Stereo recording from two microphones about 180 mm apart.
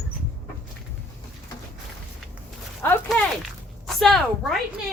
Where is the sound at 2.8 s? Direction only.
5° left (ahead or behind).